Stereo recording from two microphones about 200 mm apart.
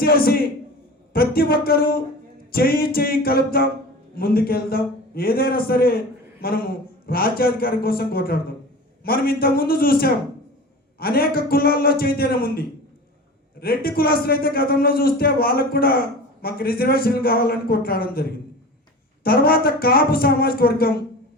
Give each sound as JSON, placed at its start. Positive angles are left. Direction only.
{"t": 0.0, "sound": "a man's voice", "side_deg": 50}